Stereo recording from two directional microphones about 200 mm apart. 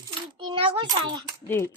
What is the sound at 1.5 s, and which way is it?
Speech, 10° left (ahead or behind).